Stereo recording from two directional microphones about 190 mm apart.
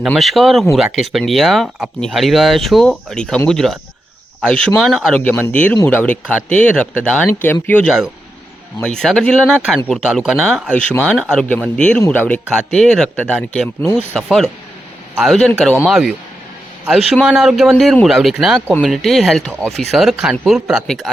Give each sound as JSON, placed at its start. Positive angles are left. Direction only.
{"t": 0.0, "sound": "speech", "side_deg": 0}